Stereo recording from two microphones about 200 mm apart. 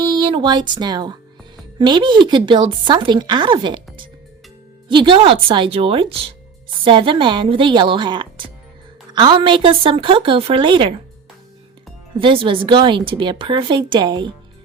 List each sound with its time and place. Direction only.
0.1 s speech: 25° right (ahead or behind)
4.9 s speech: 25° right (ahead or behind)
12.1 s speech: 25° right (ahead or behind)